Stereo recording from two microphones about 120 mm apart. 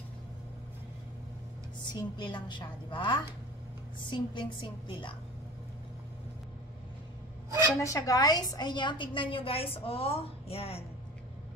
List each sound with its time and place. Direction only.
1.8 s a woman's voice: 40° left (ahead or behind)
7.8 s a woman's voice: 30° left (ahead or behind); by 10.8 s 55° left (ahead or behind)